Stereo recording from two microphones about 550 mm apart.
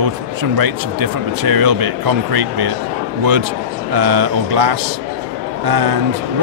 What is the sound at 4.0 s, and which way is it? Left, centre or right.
Speech, right.